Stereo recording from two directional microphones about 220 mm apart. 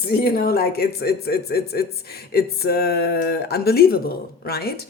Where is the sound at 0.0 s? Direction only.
45° left (ahead or behind).